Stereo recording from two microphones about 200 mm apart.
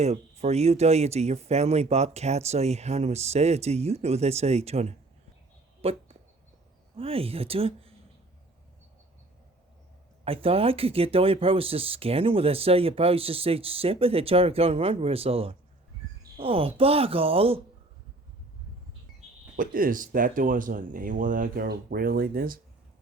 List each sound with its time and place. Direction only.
0.0 s speech: 35° right (ahead or behind)
5.8 s a sound: 30° right (ahead or behind)
6.9 s speech: 30° right (ahead or behind)
10.2 s speech: 30° right (ahead or behind)
19.5 s speech: 45° right (ahead or behind)